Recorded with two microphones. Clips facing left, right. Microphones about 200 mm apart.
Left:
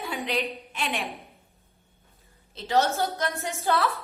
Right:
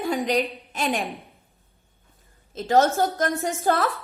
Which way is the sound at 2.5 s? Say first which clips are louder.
Right 5 dB; 45° right (ahead or behind).